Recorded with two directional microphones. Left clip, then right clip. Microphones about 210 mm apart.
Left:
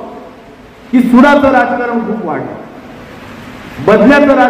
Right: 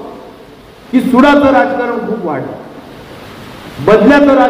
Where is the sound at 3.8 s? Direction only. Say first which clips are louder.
Even; 45° right (ahead or behind).